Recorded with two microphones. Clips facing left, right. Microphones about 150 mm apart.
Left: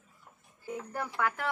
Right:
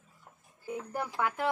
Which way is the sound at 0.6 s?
20° right (ahead or behind).